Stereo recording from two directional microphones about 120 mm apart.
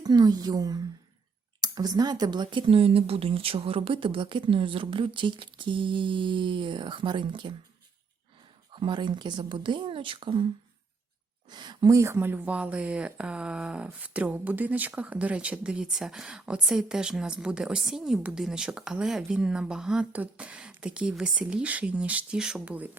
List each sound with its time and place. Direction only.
0.0 s a woman's voice: 35° right (ahead or behind)
8.7 s speech: 40° right (ahead or behind); by 22.9 s 10° right (ahead or behind)